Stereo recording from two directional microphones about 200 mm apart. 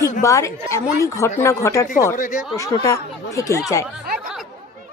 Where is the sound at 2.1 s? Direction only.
40° left (ahead or behind).